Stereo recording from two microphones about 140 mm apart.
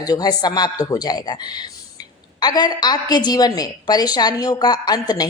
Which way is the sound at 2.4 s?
30° left (ahead or behind).